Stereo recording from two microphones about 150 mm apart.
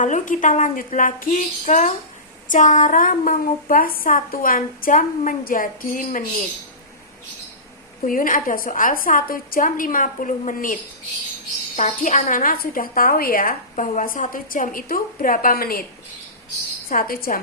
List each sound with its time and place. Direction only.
0.0 s a woman's voice: 60° left (ahead or behind)
8.0 s a woman's voice: 65° left (ahead or behind)
11.8 s a woman's voice: 55° left (ahead or behind); by 15.9 s 80° left
16.9 s a woman's voice: 75° left (ahead or behind)